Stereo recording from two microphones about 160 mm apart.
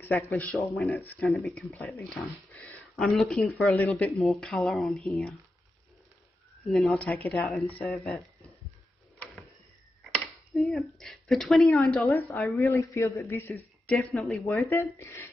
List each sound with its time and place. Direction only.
0.0 s speech: 10° left (ahead or behind)
0.3 s a woman's voice: centre (ahead or behind)
6.6 s a woman's voice: centre (ahead or behind)
10.1 s speech: centre (ahead or behind)
12.0 s a woman's voice: 15° left (ahead or behind)
14.1 s speech: centre (ahead or behind)
14.6 s a woman's voice: 15° left (ahead or behind)